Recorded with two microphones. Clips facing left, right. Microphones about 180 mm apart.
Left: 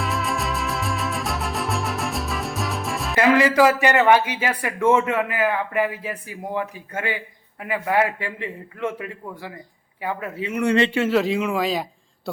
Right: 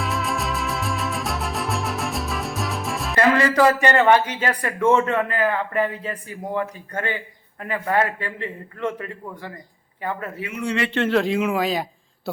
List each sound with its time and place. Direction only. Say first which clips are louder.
0.0 s music: even; centre (ahead or behind)
3.3 s a man's voice: left 1 dB; 10° left (ahead or behind)
10.5 s a man's voice: left 7 dB; 55° left (ahead or behind)
10.9 s a man's voice: even; 5° left (ahead or behind)